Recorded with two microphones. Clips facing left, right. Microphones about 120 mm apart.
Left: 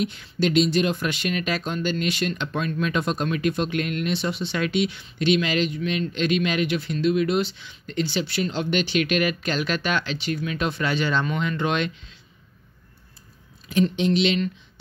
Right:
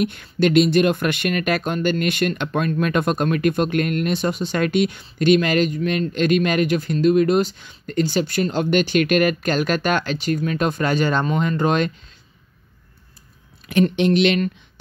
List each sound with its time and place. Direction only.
0.0 s a man's voice: 55° right (ahead or behind)
13.7 s speech: 65° right (ahead or behind)